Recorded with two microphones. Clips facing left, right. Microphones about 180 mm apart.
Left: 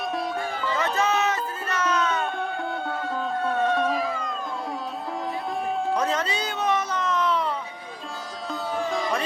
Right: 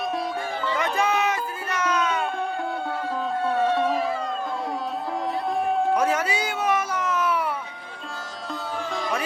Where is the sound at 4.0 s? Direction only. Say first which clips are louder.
Right 2 dB; 30° right (ahead or behind).